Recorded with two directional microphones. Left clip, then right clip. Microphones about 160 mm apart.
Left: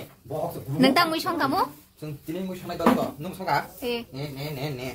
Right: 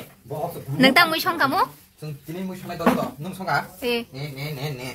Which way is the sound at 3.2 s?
25° left (ahead or behind).